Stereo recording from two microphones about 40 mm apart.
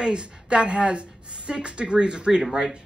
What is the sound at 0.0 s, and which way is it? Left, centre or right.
A woman's voice, right.